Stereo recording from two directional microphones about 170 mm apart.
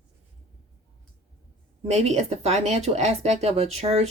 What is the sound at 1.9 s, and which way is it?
Speech, 40° right (ahead or behind).